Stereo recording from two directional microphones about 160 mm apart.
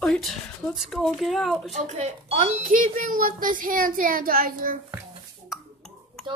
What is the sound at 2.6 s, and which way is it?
Speech, 55° right (ahead or behind).